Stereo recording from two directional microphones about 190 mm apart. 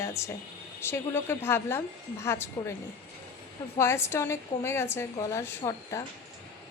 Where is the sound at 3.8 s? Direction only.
15° left (ahead or behind).